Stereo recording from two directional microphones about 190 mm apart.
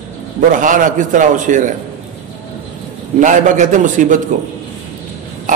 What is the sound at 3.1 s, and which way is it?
A man's voice, 40° right (ahead or behind).